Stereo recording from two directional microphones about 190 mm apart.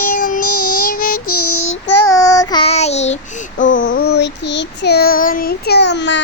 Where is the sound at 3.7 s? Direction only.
45° left (ahead or behind).